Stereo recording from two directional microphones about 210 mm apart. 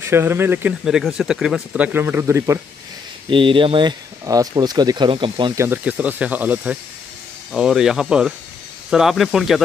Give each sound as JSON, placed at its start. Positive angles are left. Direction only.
{"t": 0.0, "sound": "speech", "side_deg": -10}
{"t": 3.3, "sound": "speech", "side_deg": -25}
{"t": 5.7, "sound": "speech", "side_deg": -5}